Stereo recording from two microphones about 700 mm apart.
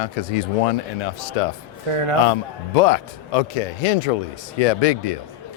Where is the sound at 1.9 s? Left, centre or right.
Right.